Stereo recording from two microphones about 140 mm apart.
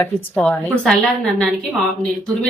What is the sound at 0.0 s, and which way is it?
Speech, 10° left (ahead or behind).